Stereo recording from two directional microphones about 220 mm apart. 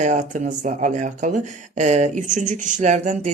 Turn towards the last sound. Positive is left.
turn(degrees=-35)  # may be behind; listen again after turning